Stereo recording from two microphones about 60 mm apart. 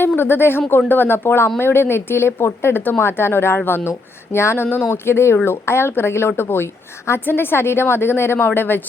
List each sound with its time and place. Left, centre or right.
0.2 s a woman's voice: left